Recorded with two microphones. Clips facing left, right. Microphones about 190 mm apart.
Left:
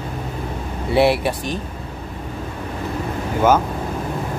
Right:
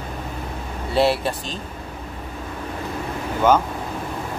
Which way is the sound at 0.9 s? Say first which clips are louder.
Left 3 dB; 15° left (ahead or behind).